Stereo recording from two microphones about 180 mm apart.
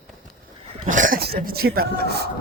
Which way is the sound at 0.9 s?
45° right (ahead or behind).